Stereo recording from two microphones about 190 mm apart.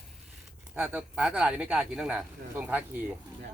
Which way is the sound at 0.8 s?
5° right (ahead or behind).